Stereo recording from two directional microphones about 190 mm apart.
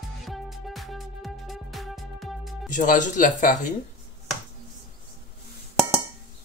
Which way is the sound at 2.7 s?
40° left (ahead or behind).